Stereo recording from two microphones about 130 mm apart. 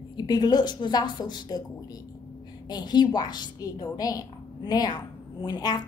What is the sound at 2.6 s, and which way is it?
A woman's voice, 35° left (ahead or behind).